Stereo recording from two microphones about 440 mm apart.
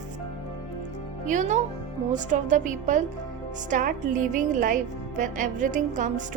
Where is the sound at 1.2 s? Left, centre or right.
Centre.